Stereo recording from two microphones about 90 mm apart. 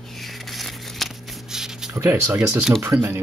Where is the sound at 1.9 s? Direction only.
30° right (ahead or behind).